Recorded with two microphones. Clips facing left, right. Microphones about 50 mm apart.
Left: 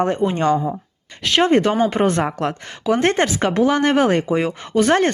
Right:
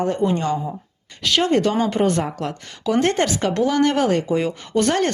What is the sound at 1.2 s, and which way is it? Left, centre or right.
Speech, left.